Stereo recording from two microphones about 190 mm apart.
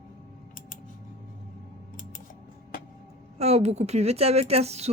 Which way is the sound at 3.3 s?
35° right (ahead or behind).